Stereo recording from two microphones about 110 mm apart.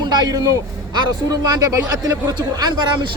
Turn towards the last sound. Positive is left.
turn(degrees=-45)  # may be behind; listen again after turning